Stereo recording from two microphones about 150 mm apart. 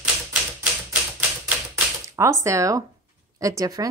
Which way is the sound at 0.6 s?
10° right (ahead or behind).